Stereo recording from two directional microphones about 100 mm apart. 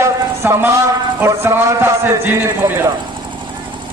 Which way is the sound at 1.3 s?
25° right (ahead or behind).